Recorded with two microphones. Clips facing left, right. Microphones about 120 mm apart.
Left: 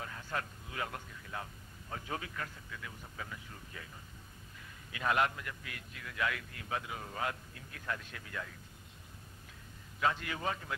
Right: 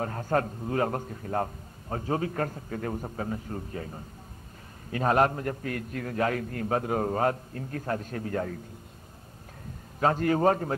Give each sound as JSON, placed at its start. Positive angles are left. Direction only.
{"t": 0.0, "sound": "a man's voice", "side_deg": -45}
{"t": 9.9, "sound": "a man's voice", "side_deg": -45}